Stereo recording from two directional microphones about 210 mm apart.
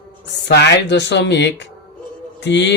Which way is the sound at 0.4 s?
55° left (ahead or behind).